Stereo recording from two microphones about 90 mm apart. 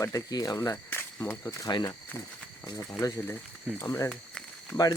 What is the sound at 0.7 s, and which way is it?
Speech, 25° left (ahead or behind).